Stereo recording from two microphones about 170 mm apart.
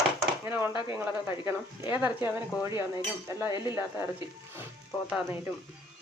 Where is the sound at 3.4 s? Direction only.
25° left (ahead or behind).